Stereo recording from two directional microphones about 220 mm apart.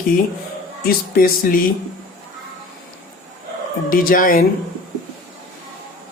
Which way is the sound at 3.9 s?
40° left (ahead or behind).